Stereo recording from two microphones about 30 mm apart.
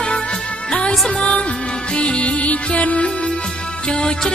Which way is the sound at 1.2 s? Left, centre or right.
Left.